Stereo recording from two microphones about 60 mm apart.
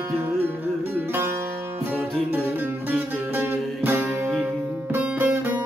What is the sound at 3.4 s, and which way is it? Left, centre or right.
Music, right.